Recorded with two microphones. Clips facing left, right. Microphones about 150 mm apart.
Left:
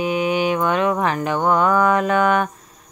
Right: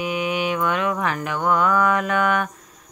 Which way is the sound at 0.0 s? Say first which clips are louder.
Left 4 dB; 30° left (ahead or behind).